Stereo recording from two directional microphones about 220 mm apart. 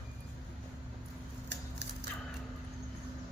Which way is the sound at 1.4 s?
50° right (ahead or behind).